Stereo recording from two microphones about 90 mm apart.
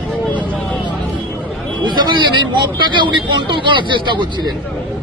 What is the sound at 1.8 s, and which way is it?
Speech, 55° right (ahead or behind).